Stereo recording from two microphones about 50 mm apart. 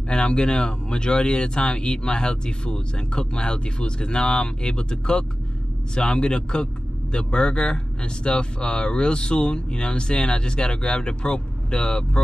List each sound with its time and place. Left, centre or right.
0.1 s speech: centre